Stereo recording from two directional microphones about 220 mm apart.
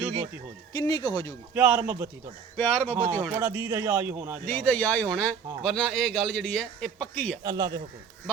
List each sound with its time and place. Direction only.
0.7 s speech: 15° left (ahead or behind)
1.5 s a man's voice: 10° right (ahead or behind)
2.6 s speech: 10° left (ahead or behind)
3.0 s a man's voice: 10° right (ahead or behind)
4.4 s speech: 10° left (ahead or behind)
7.4 s a man's voice: 20° right (ahead or behind)